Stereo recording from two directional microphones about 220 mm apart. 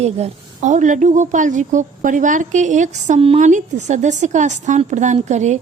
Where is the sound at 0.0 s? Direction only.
30° right (ahead or behind).